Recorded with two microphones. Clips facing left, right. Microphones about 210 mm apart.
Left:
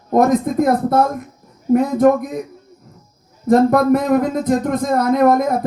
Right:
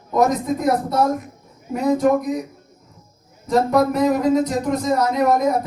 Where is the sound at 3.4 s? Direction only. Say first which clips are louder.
Left 5 dB; 55° left (ahead or behind).